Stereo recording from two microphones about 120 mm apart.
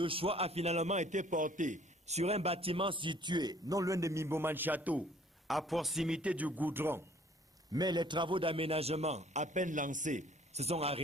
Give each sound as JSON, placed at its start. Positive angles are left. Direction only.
{"t": 0.0, "sound": "a man's voice", "side_deg": -50}
{"t": 5.5, "sound": "a man's voice", "side_deg": 0}
{"t": 7.7, "sound": "a man's voice", "side_deg": -35}